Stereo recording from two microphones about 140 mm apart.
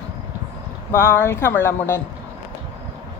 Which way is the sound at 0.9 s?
15° left (ahead or behind).